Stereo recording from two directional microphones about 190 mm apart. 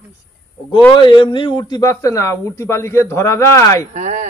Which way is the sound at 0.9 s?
25° left (ahead or behind).